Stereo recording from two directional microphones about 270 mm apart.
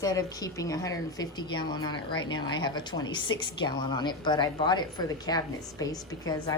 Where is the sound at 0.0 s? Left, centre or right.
Centre.